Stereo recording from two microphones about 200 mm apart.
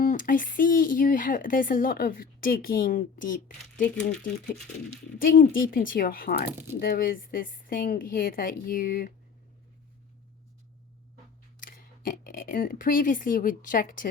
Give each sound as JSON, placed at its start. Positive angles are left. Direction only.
{"t": 0.0, "sound": "speech", "side_deg": 40}
{"t": 5.2, "sound": "speech", "side_deg": 45}
{"t": 11.6, "sound": "speech", "side_deg": 45}